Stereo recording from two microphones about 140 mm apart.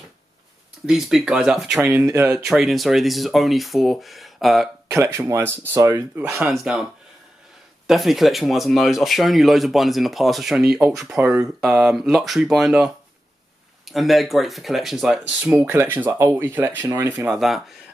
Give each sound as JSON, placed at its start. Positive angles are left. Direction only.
{"t": 0.8, "sound": "speech", "side_deg": -5}
{"t": 4.8, "sound": "speech", "side_deg": -20}
{"t": 6.4, "sound": "speech", "side_deg": -5}
{"t": 15.5, "sound": "speech", "side_deg": -20}
{"t": 17.3, "sound": "speech", "side_deg": 0}